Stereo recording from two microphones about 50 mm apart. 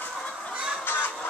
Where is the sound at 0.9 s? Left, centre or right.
Left.